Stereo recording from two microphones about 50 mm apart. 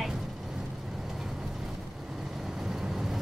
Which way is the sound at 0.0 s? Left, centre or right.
Centre.